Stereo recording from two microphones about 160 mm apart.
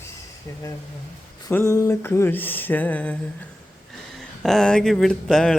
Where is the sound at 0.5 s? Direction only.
20° left (ahead or behind).